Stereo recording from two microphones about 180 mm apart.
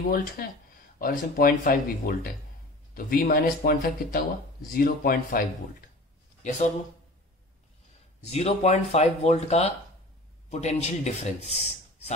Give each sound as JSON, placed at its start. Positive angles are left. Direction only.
{"t": 0.1, "sound": "speech", "side_deg": 55}
{"t": 8.3, "sound": "speech", "side_deg": 35}